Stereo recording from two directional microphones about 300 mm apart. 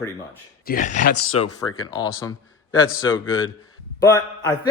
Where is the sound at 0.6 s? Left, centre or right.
Left.